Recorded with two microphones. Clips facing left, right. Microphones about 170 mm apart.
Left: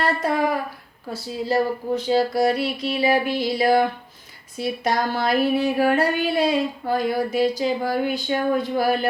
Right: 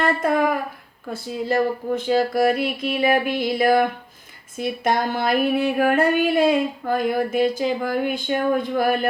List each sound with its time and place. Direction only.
0.0 s speech: 50° right (ahead or behind)